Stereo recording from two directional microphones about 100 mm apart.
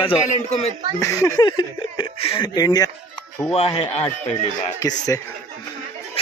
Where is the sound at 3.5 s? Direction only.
90° left.